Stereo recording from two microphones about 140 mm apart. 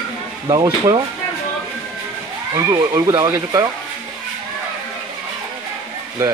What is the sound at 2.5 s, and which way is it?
Speech, 25° right (ahead or behind).